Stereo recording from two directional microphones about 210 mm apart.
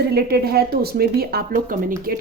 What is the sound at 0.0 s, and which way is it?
A woman's voice, 50° right (ahead or behind).